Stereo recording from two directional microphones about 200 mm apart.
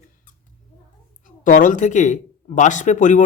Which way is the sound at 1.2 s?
40° left (ahead or behind).